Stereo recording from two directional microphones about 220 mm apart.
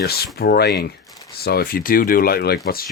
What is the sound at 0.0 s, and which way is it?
Speech, 45° left (ahead or behind).